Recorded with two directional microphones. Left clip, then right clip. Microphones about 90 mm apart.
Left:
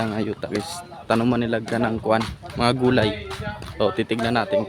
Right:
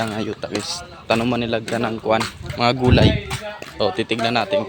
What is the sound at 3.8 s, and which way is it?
Speech, 55° left (ahead or behind).